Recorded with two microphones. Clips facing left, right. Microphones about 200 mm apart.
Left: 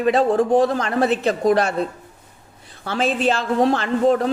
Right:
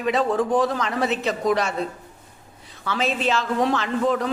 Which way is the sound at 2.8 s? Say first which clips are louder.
Left 4 dB; 50° left (ahead or behind).